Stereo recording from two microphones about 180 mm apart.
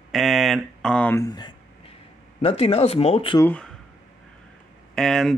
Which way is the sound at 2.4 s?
35° left (ahead or behind).